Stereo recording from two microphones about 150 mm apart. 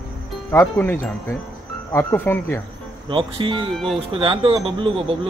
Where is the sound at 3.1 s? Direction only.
35° right (ahead or behind).